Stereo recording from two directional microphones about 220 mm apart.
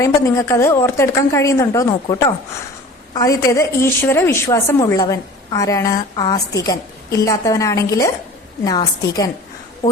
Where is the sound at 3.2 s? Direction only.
15° left (ahead or behind).